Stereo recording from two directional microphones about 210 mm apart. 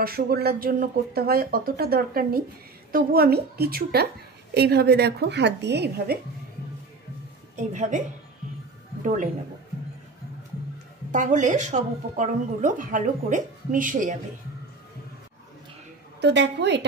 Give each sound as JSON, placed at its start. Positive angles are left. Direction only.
{"t": 0.0, "sound": "speech", "side_deg": -50}
{"t": 7.5, "sound": "a woman's voice", "side_deg": -35}
{"t": 9.0, "sound": "a man's voice", "side_deg": -35}
{"t": 11.1, "sound": "a woman's voice", "side_deg": -35}
{"t": 16.2, "sound": "a woman's voice", "side_deg": -55}